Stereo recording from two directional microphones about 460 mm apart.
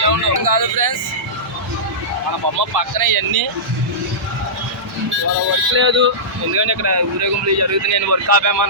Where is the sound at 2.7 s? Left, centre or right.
Right.